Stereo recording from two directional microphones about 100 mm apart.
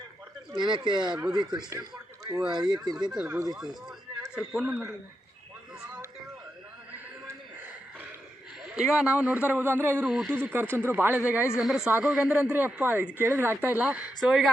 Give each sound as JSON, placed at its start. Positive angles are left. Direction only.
{"t": 0.5, "sound": "speech", "side_deg": -50}
{"t": 1.1, "sound": "speech", "side_deg": -5}
{"t": 1.4, "sound": "speech", "side_deg": -45}
{"t": 1.7, "sound": "speech", "side_deg": -35}
{"t": 2.5, "sound": "speech", "side_deg": -45}
{"t": 4.4, "sound": "speech", "side_deg": -10}
{"t": 8.6, "sound": "speech", "side_deg": -10}
{"t": 11.5, "sound": "speech", "side_deg": -5}
{"t": 11.9, "sound": "speech", "side_deg": -15}
{"t": 14.2, "sound": "speech", "side_deg": 0}